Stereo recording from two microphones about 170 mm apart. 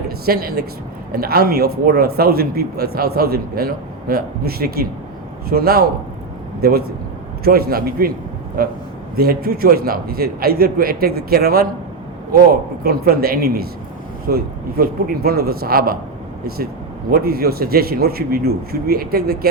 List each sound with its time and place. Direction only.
0.3 s speech: 65° right (ahead or behind)
17.1 s speech: 65° right (ahead or behind)